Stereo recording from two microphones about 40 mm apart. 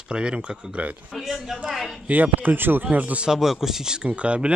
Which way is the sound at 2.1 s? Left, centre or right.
Right.